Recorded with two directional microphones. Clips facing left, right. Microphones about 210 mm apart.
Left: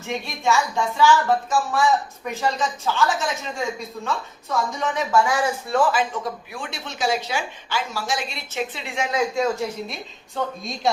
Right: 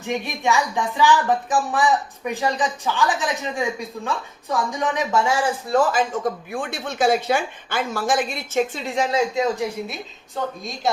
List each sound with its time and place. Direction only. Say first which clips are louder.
0.0 s a woman's voice: right 2 dB; 15° right (ahead or behind); by 5.8 s 30° right (ahead or behind)
5.9 s speech: right 3 dB; 45° right (ahead or behind)
9.1 s speech: left 1 dB; 20° right (ahead or behind)
10.6 s speech: left 1 dB; centre (ahead or behind)